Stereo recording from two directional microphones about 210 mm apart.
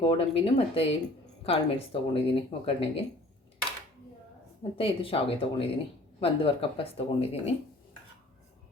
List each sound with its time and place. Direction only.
0.0 s speech: 25° left (ahead or behind)
4.8 s speech: 25° left (ahead or behind)